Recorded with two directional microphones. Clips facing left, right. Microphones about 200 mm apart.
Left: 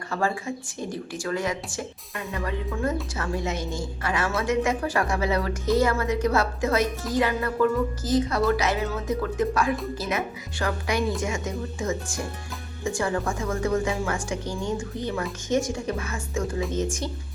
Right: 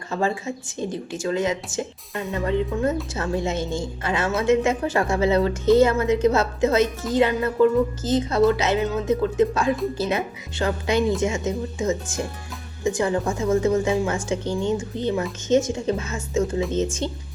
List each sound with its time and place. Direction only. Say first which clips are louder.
0.1 s speech: right 3 dB; 25° right (ahead or behind)